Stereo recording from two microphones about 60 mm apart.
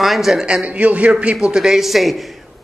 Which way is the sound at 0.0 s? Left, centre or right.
Centre.